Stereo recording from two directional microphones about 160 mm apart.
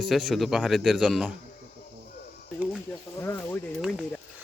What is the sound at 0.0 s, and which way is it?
Speech, centre (ahead or behind).